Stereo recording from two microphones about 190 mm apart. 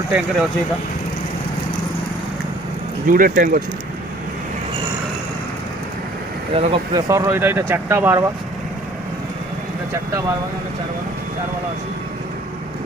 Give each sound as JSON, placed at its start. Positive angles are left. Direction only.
{"t": 0.1, "sound": "speech", "side_deg": -5}
{"t": 3.1, "sound": "speech", "side_deg": -45}
{"t": 6.5, "sound": "speech", "side_deg": -30}
{"t": 7.1, "sound": "speech", "side_deg": -15}